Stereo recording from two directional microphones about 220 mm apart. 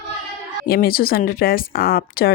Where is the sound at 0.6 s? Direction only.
45° left (ahead or behind).